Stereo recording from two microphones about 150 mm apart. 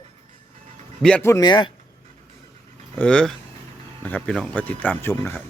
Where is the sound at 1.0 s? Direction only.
10° left (ahead or behind).